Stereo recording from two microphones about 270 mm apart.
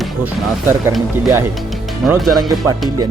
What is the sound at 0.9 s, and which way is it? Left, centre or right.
Speech, centre.